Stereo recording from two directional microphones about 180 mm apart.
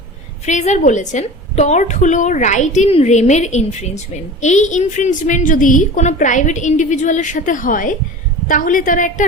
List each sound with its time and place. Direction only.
0.4 s a woman's voice: 40° left (ahead or behind)